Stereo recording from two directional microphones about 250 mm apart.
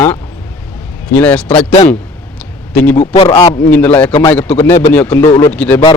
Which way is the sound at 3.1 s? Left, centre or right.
Centre.